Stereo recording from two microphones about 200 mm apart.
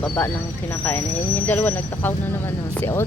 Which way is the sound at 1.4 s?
10° left (ahead or behind).